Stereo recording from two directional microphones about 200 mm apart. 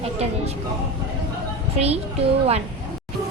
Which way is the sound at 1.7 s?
30° right (ahead or behind).